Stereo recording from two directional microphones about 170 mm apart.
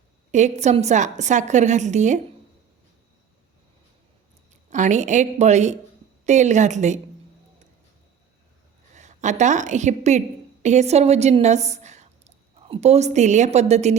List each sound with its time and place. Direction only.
0.3 s a woman's voice: 45° right (ahead or behind)
4.7 s a woman's voice: 45° right (ahead or behind)
9.0 s a woman's voice: 45° right (ahead or behind)